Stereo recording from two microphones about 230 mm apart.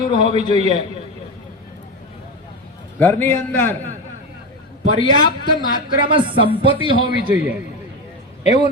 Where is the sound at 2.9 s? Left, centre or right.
Centre.